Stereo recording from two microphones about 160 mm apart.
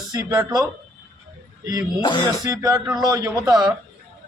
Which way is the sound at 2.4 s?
25° right (ahead or behind).